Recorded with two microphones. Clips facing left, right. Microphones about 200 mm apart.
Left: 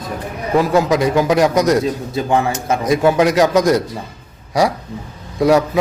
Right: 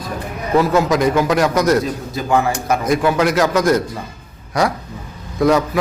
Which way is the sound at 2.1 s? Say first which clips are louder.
Right 1 dB; 25° left (ahead or behind).